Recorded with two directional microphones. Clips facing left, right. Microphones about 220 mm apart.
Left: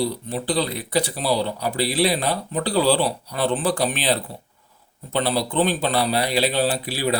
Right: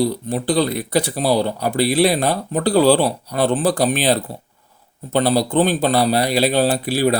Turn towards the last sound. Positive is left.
turn(degrees=-45)  # may be behind; listen again after turning